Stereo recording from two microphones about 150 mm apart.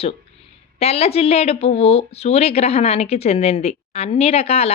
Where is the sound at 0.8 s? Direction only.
45° left (ahead or behind).